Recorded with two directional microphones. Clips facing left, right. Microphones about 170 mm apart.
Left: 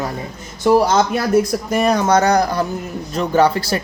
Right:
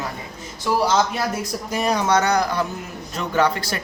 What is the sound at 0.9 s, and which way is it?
Speech, 50° left (ahead or behind).